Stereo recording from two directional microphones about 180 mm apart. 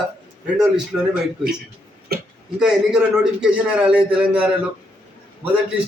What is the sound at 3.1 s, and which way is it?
A man's voice, 5° right (ahead or behind).